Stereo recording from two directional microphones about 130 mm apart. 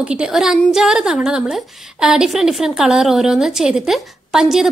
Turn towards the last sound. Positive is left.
turn(degrees=-5)  # may be behind; listen again after turning